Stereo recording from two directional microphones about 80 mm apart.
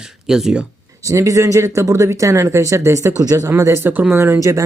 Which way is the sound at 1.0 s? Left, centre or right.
Right.